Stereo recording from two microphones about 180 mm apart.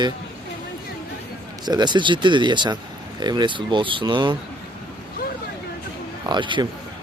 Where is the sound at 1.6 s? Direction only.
25° right (ahead or behind).